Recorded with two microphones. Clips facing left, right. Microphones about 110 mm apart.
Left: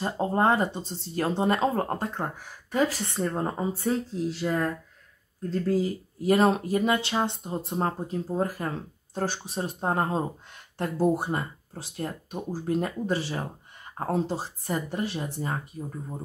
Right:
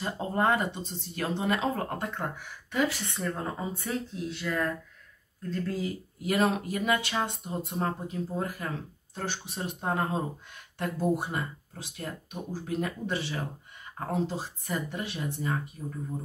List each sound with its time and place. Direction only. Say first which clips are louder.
0.0 s speech: left 4 dB; 30° left (ahead or behind)